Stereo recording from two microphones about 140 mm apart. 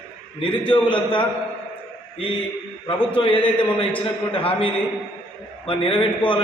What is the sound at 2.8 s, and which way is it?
A man's voice, 40° left (ahead or behind).